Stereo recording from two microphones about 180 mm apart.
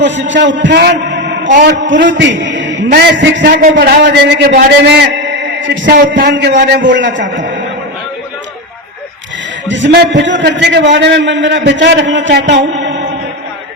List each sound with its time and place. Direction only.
0.0 s a man's voice: 90° right
1.7 s a man's voice: 90° right
6.5 s a man's voice: 50° right (ahead or behind)
6.9 s a man's voice: 90° right
9.6 s a man's voice: 90° right
10.4 s a man's voice: 70° right (ahead or behind)